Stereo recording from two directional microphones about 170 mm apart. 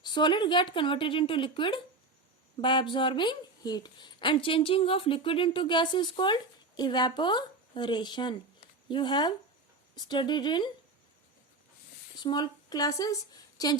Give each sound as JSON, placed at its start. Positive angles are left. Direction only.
{"t": 0.0, "sound": "a woman's voice", "side_deg": 25}
{"t": 12.1, "sound": "a woman's voice", "side_deg": 25}